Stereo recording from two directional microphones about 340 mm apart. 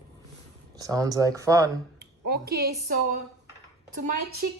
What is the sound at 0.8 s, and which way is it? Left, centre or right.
Speech, centre.